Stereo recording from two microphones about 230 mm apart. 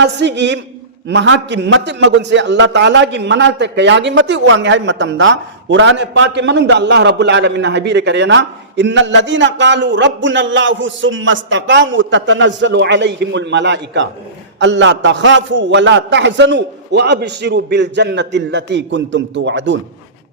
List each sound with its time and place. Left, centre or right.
0.0 s a man's voice: right